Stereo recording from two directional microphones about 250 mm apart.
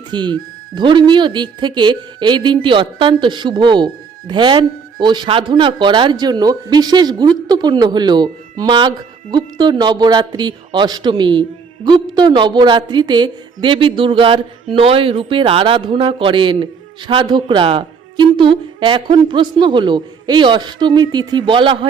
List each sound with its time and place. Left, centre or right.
0.1 s a woman's voice: centre